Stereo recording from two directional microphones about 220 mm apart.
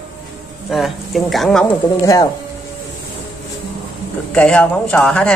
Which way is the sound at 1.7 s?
15° left (ahead or behind).